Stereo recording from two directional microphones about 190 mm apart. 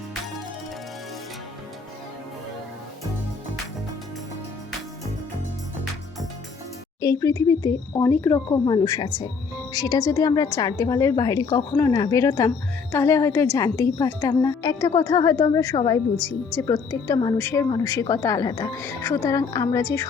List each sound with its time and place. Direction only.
7.0 s a woman's voice: 20° left (ahead or behind)